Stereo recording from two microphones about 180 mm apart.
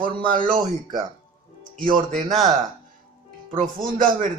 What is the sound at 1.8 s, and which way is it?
Speech, 50° right (ahead or behind).